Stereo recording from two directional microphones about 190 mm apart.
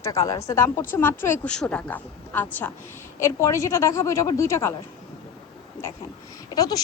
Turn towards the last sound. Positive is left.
turn(degrees=20)  # may be behind; listen again after turning